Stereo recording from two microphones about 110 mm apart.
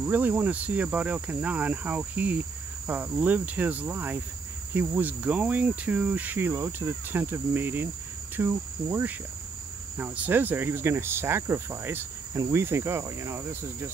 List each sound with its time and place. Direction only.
0.0 s insect: 15° right (ahead or behind)
7.1 s cricket: 20° right (ahead or behind)